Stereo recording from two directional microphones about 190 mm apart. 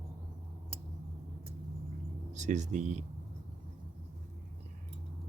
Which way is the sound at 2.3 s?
40° right (ahead or behind).